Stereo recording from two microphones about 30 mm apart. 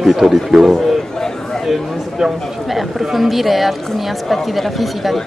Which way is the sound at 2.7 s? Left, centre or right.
Centre.